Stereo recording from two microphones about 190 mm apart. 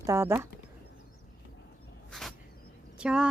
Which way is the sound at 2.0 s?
Centre (ahead or behind).